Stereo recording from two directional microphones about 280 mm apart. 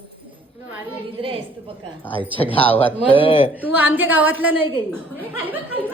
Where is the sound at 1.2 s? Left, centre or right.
Centre.